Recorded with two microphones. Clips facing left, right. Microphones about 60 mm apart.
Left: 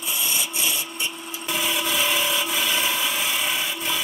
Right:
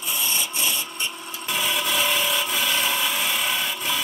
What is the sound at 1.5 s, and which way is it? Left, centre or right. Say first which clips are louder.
Wood: even; centre.